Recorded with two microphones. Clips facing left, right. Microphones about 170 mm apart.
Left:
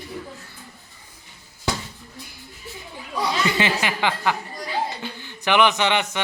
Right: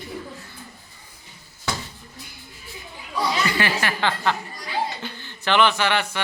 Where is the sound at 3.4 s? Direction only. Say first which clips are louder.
Left 1 dB; 20° left (ahead or behind).